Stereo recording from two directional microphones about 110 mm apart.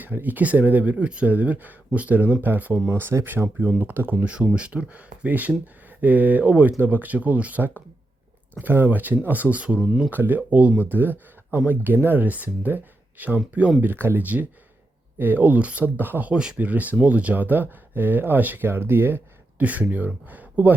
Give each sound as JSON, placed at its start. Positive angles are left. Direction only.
{"t": 0.0, "sound": "speech", "side_deg": -15}
{"t": 2.9, "sound": "speech", "side_deg": -25}
{"t": 10.1, "sound": "speech", "side_deg": -15}